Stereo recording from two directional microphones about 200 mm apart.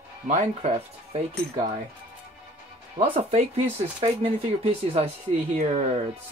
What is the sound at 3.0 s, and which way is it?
Speech, 30° right (ahead or behind).